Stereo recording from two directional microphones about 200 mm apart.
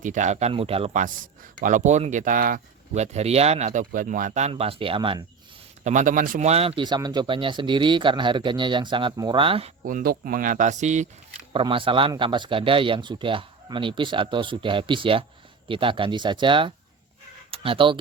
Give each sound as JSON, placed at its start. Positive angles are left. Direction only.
{"t": 0.0, "sound": "a man's voice", "side_deg": -40}
{"t": 5.8, "sound": "a man's voice", "side_deg": -40}
{"t": 9.8, "sound": "speech", "side_deg": -45}
{"t": 11.5, "sound": "a man's voice", "side_deg": -25}